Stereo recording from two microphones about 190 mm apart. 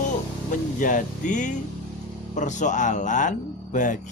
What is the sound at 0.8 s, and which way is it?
Speech, 45° left (ahead or behind).